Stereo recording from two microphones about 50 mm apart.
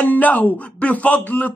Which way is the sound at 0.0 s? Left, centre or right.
Left.